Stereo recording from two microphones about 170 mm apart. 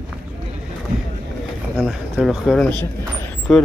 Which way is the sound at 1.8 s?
Centre (ahead or behind).